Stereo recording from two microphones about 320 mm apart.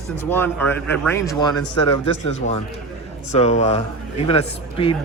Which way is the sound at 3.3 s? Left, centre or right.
Left.